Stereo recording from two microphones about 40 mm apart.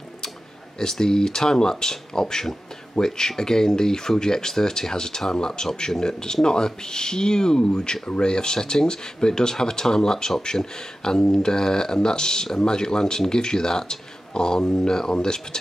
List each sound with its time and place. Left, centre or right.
0.7 s speech: centre